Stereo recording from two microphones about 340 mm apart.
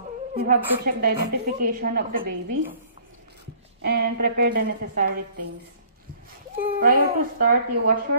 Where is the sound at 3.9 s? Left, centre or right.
Right.